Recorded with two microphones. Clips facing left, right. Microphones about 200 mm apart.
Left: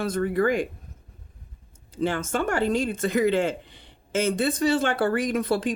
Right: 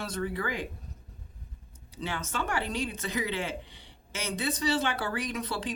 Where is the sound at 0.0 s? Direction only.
50° left (ahead or behind).